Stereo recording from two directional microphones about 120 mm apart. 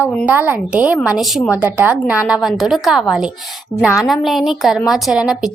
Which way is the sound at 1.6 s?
10° right (ahead or behind).